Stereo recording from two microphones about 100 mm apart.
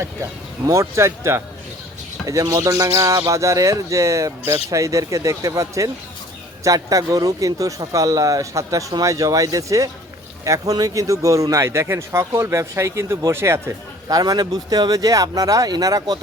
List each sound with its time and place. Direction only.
0.0 s speech: 30° right (ahead or behind)
14.1 s speech: 40° right (ahead or behind)